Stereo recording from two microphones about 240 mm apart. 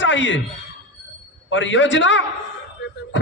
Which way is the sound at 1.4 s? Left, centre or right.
Left.